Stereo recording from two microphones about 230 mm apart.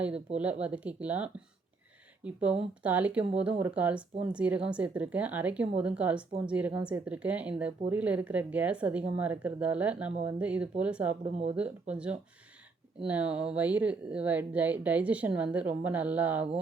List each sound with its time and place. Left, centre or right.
0.3 s speech: centre
11.2 s speech: right
11.5 s speech: centre